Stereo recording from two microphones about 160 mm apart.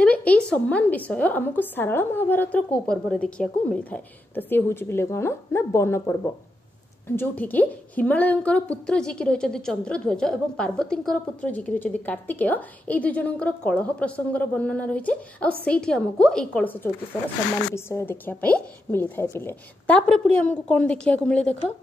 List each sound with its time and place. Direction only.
0.0 s a woman's voice: 10° left (ahead or behind)